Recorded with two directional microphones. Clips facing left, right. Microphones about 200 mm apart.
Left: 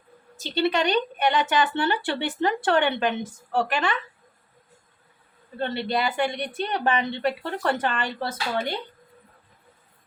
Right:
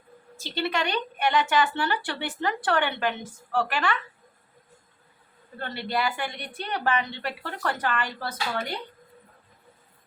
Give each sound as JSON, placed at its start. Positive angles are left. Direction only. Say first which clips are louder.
{"t": 0.3, "sound": "a woman's voice", "louder": "left 5 dB", "side_deg": 20}
{"t": 5.5, "sound": "a woman's voice", "louder": "left 4 dB", "side_deg": 20}